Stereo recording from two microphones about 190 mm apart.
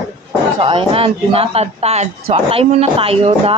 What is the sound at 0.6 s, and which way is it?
A man's voice, 30° right (ahead or behind).